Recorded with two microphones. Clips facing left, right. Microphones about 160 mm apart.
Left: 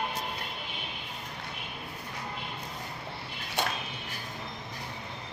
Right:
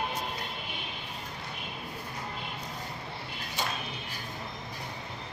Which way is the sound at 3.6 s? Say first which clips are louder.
Left 3 dB; 60° left (ahead or behind).